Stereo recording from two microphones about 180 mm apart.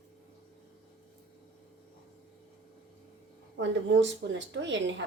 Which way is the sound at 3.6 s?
85° right.